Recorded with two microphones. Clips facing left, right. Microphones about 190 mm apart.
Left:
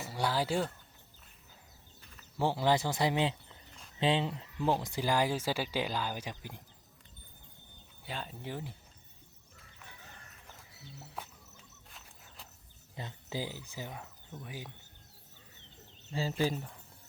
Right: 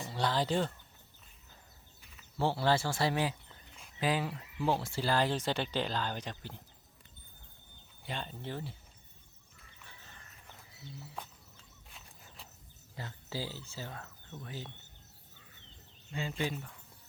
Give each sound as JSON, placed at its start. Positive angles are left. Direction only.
{"t": 0.0, "sound": "speech", "side_deg": 10}
{"t": 2.4, "sound": "speech", "side_deg": 15}
{"t": 8.0, "sound": "speech", "side_deg": 5}
{"t": 11.9, "sound": "a sound", "side_deg": 0}
{"t": 13.0, "sound": "speech", "side_deg": 20}
{"t": 16.4, "sound": "speech", "side_deg": 35}